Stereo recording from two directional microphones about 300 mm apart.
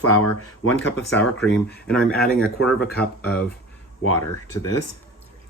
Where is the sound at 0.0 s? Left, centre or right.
Left.